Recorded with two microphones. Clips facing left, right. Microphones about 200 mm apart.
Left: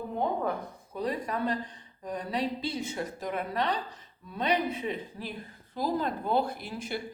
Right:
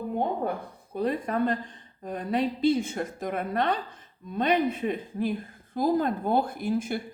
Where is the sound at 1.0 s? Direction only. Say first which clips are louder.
Right 4 dB; 50° right (ahead or behind).